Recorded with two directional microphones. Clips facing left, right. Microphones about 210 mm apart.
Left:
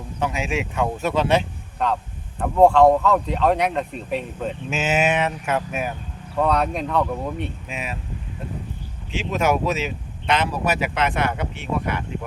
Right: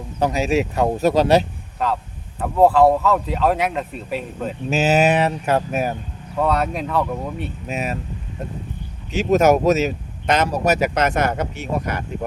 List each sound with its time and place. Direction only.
0.2 s speech: 35° right (ahead or behind)
1.8 s speech: 5° right (ahead or behind)
4.7 s speech: 35° right (ahead or behind)
6.3 s speech: centre (ahead or behind)
7.7 s speech: 40° right (ahead or behind)
9.1 s speech: 40° right (ahead or behind)